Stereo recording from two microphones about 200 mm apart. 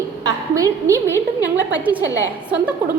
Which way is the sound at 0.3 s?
15° right (ahead or behind).